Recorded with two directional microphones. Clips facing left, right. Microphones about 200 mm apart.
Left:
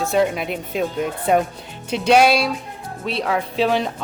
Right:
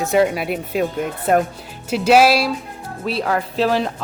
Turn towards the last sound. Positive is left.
turn(degrees=0)  # may be behind; listen again after turning